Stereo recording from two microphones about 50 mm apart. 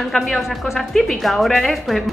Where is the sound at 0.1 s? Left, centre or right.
Centre.